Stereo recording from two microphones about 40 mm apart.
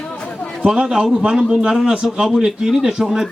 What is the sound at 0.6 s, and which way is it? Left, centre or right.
A man's voice, centre.